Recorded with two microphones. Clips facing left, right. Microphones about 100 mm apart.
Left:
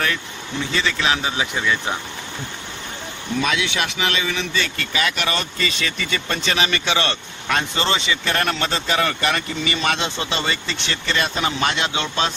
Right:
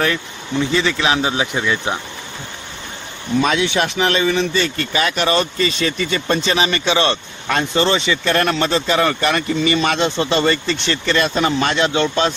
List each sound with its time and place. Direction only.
1.0 s speech: 25° right (ahead or behind)
3.3 s speech: 40° right (ahead or behind)